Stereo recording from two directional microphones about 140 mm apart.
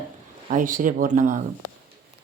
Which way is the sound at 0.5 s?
75° right (ahead or behind).